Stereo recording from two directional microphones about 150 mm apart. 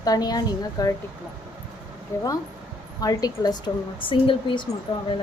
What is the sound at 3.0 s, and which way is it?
A woman's voice, 25° left (ahead or behind).